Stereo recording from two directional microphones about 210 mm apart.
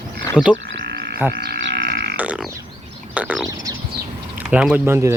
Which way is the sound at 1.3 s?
50° right (ahead or behind).